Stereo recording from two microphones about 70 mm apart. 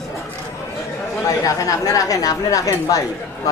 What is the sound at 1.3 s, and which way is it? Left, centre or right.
A woman's voice, left.